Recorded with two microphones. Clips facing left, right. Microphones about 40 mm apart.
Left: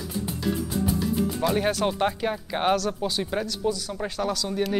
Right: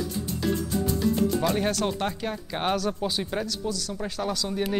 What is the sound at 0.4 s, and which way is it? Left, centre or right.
Music, centre.